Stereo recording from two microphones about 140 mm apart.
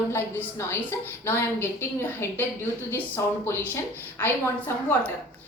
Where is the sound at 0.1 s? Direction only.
20° left (ahead or behind).